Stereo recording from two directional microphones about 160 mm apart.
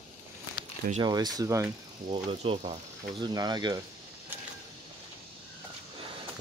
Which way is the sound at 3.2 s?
25° right (ahead or behind).